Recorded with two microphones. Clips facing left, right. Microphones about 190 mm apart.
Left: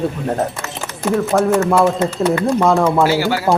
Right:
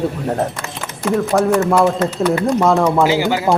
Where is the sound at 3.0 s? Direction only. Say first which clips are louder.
Even; 15° right (ahead or behind).